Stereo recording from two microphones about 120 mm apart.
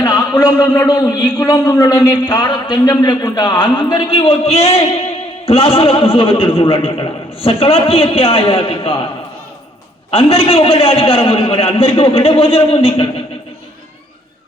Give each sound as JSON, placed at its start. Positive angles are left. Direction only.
{"t": 0.0, "sound": "a man's voice", "side_deg": 30}
{"t": 10.1, "sound": "a man's voice", "side_deg": 50}